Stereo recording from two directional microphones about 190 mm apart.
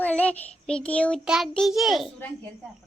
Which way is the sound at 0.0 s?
5° left (ahead or behind).